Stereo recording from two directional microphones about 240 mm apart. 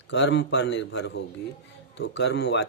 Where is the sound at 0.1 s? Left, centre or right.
Left.